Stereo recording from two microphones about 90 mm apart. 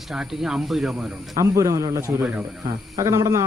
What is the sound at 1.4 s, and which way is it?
Speech, 35° right (ahead or behind).